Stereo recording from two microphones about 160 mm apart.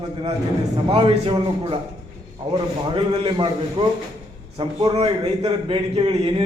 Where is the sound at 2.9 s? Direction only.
35° right (ahead or behind).